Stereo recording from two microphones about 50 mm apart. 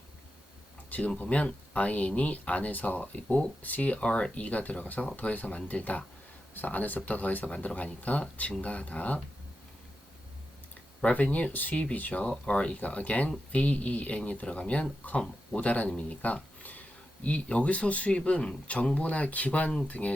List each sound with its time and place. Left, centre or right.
0.9 s a sound: left
1.2 s speech: left
3.6 s speech: left
11.0 s speech: left
16.0 s a sound: left
17.2 s speech: left